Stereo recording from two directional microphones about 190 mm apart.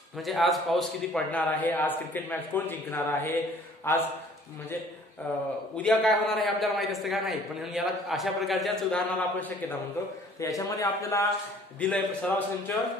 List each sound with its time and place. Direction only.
0.2 s a man's voice: centre (ahead or behind)
5.2 s a man's voice: 10° left (ahead or behind)
10.4 s a man's voice: 15° left (ahead or behind)